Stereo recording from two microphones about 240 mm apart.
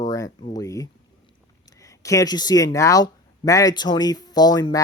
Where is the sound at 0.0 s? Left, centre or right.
Centre.